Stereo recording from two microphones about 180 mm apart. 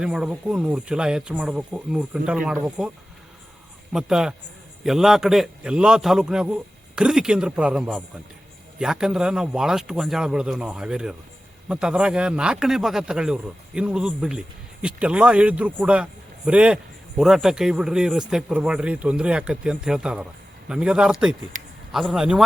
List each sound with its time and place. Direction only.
0.0 s speech: 5° right (ahead or behind)
3.9 s speech: 5° right (ahead or behind)
21.5 s a sound: 45° right (ahead or behind)
21.9 s speech: centre (ahead or behind)